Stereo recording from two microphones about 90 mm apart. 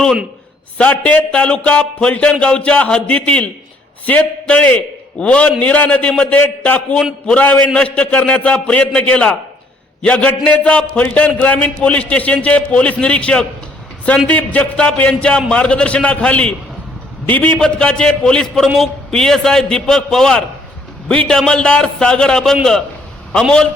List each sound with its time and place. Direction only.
0.8 s a man's voice: 15° left (ahead or behind)
7.4 s a man's voice: 20° left (ahead or behind)